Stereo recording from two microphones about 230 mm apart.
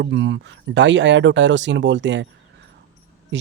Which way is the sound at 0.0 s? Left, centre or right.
Right.